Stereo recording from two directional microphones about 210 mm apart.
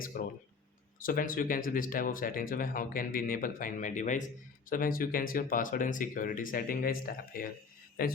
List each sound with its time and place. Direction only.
0.0 s speech: 40° left (ahead or behind)